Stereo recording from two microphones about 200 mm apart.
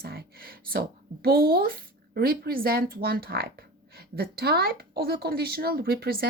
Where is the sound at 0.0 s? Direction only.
50° right (ahead or behind).